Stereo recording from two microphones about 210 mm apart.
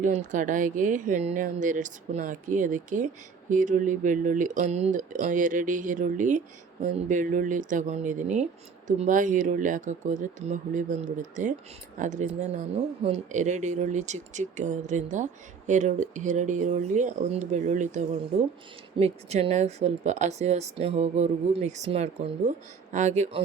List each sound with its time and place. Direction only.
0.0 s speech: 35° right (ahead or behind)